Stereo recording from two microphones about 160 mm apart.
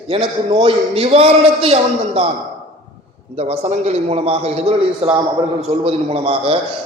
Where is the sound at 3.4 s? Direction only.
45° right (ahead or behind).